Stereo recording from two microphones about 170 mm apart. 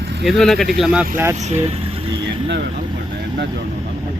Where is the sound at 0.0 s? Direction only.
75° right (ahead or behind).